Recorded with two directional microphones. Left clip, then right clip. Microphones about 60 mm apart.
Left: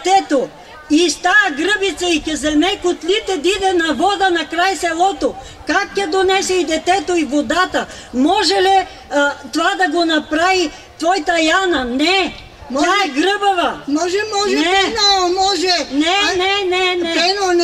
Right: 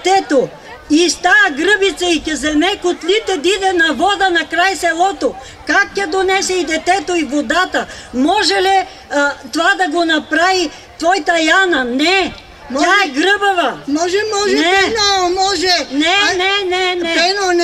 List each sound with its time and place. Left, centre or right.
0.0 s a woman's voice: right